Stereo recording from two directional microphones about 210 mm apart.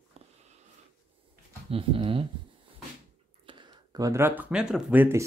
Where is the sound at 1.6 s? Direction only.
25° right (ahead or behind).